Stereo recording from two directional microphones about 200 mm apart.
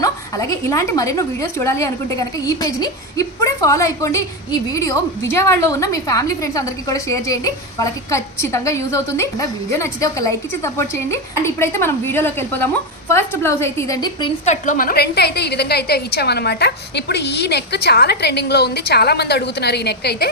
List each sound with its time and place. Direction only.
0.0 s a woman's voice: 15° left (ahead or behind)
14.4 s a woman's voice: 35° left (ahead or behind); by 20.3 s 55° left (ahead or behind)